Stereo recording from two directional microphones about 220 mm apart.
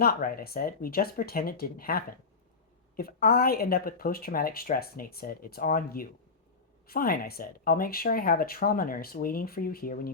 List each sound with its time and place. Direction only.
0.0 s speech: 40° left (ahead or behind)